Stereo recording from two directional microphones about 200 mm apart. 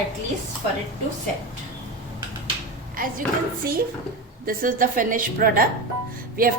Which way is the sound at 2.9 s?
45° right (ahead or behind).